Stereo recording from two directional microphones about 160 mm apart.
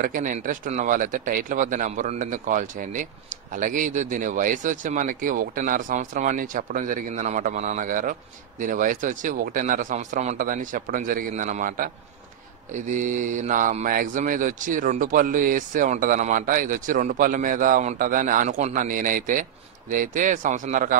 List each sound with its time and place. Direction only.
0.0 s speech: 55° right (ahead or behind)